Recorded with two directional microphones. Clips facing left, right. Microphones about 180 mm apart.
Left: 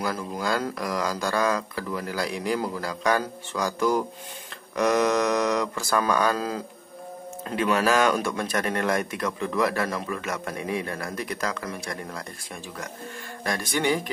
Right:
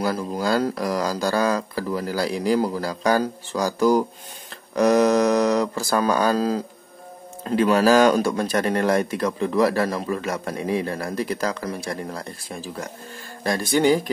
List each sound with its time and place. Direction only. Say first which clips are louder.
0.0 s speech: right 5 dB; 35° right (ahead or behind)